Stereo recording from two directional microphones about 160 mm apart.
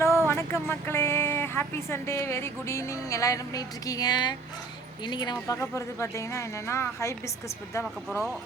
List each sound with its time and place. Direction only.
0.3 s speech: 15° left (ahead or behind)